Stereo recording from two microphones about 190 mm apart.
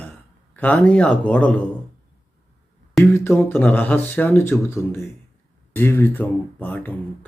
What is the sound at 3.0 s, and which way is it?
Speech, 15° left (ahead or behind).